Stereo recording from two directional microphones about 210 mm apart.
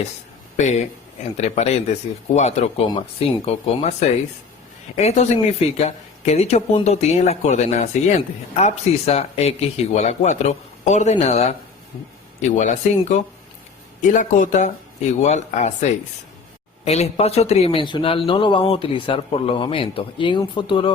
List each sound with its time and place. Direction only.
0.5 s speech: 35° left (ahead or behind)
4.9 s a man's voice: 30° left (ahead or behind)